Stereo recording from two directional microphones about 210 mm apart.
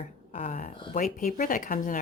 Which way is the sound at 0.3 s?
30° left (ahead or behind).